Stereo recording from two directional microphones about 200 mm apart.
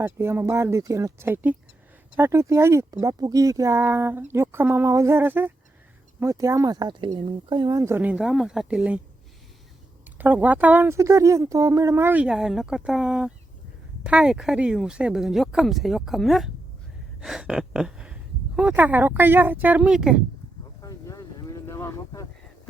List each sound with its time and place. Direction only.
0.0 s speech: 10° right (ahead or behind)
10.2 s speech: 10° right (ahead or behind)
20.8 s boat: 15° left (ahead or behind)